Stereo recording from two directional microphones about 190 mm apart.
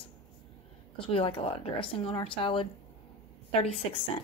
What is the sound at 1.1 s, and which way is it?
A woman's voice, 30° left (ahead or behind).